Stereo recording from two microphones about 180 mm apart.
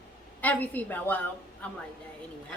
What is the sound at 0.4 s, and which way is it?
A woman's voice, 10° left (ahead or behind).